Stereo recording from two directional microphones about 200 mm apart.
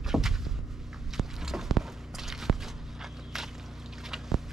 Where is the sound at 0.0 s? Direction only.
Centre (ahead or behind).